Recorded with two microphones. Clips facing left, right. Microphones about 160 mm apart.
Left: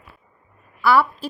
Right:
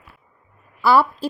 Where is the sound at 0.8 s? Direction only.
30° right (ahead or behind).